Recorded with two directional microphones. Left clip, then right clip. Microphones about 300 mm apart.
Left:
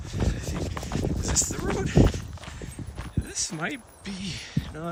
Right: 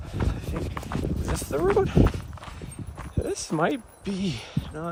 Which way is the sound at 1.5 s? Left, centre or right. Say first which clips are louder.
Right 5 dB; centre.